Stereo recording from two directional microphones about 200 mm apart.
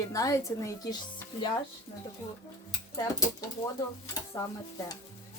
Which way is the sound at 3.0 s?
15° left (ahead or behind).